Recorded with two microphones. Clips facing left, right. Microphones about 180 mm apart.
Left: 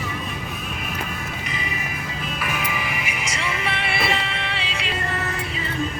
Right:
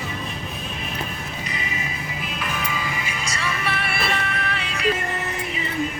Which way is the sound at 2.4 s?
10° left (ahead or behind).